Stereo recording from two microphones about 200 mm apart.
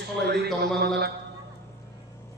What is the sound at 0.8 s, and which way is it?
Speech, 55° right (ahead or behind).